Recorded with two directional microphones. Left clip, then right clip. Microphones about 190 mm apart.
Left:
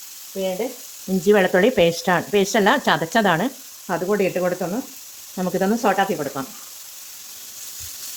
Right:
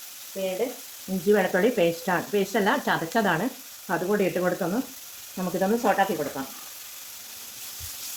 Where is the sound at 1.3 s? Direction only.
55° left (ahead or behind); by 4.5 s 35° left (ahead or behind).